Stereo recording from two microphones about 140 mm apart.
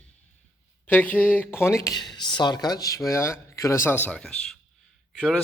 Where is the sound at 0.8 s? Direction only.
10° left (ahead or behind).